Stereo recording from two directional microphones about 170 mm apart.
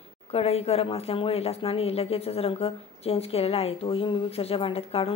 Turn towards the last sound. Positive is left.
turn(degrees=35)  # may be behind; listen again after turning